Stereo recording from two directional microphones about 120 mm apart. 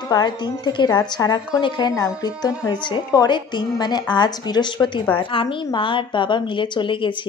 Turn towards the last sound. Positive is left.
turn(degrees=45)  # may be behind; listen again after turning